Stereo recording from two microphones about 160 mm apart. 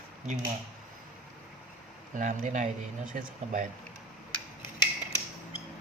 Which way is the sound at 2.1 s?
50° right (ahead or behind).